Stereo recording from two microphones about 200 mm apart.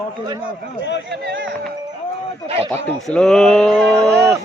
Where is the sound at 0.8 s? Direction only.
65° left (ahead or behind).